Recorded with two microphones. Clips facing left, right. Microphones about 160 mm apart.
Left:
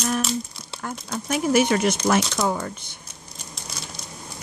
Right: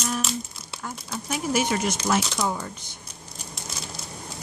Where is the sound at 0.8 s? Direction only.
60° left (ahead or behind).